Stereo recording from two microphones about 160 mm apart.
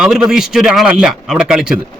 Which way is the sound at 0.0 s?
5° right (ahead or behind).